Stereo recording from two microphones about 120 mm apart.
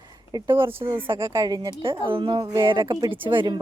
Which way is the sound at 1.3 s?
30° right (ahead or behind).